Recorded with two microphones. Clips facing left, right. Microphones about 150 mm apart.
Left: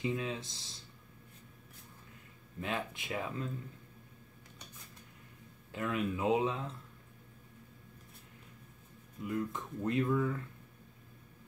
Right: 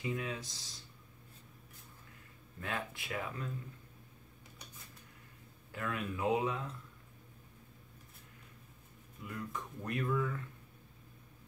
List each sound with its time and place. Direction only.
0.0 s speech: 25° left (ahead or behind)
2.6 s speech: 20° left (ahead or behind)
5.7 s speech: 20° left (ahead or behind)
9.2 s speech: 25° left (ahead or behind)